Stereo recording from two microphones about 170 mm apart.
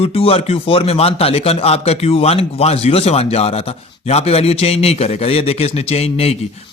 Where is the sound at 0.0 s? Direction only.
35° left (ahead or behind).